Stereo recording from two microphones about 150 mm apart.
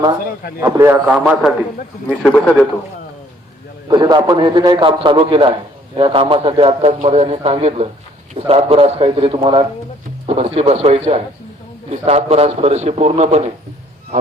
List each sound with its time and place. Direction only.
0.6 s a man's voice: 15° right (ahead or behind)
2.2 s a man's voice: 5° left (ahead or behind)
3.8 s a man's voice: 30° right (ahead or behind); by 13.5 s 50° right (ahead or behind)